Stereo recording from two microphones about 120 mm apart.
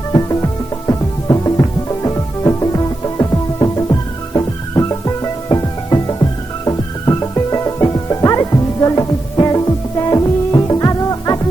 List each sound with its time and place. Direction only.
0.1 s music: 30° left (ahead or behind)